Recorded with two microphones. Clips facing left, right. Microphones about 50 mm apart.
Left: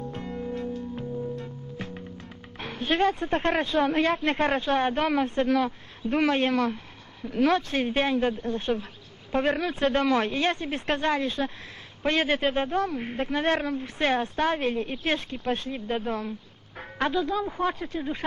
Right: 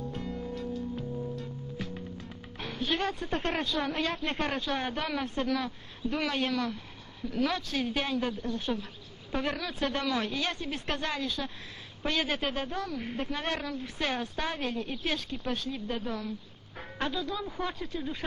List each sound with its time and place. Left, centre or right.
0.1 s music: left
3.0 s speech: left